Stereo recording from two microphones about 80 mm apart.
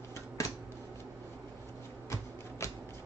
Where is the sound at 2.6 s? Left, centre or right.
Left.